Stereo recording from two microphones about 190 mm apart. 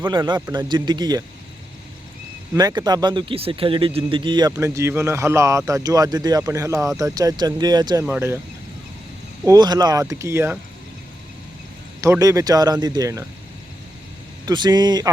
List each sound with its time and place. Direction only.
0.0 s speech: 20° right (ahead or behind)
2.6 s speech: 20° right (ahead or behind)
8.0 s speech: 10° right (ahead or behind)
9.4 s speech: 20° right (ahead or behind)
11.9 s speech: 15° right (ahead or behind)
14.4 s speech: 20° right (ahead or behind)